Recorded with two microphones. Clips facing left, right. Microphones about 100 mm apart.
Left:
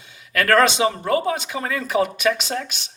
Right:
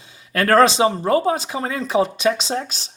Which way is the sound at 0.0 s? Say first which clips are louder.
Right 1 dB; 30° right (ahead or behind).